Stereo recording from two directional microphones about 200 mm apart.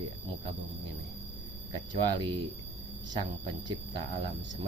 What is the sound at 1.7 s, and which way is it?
Speech, 20° right (ahead or behind).